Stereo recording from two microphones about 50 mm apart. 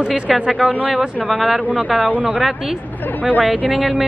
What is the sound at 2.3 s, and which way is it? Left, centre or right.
A woman's voice, centre.